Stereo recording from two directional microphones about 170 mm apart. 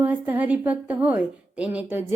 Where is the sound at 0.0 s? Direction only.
10° right (ahead or behind).